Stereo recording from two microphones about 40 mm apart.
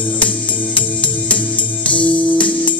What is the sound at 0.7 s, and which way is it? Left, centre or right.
Music, left.